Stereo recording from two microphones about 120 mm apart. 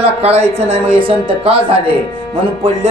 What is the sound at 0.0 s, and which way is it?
Speech, 60° right (ahead or behind).